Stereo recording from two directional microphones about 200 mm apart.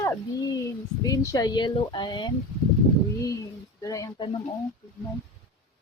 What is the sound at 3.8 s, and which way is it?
Speech, 15° left (ahead or behind).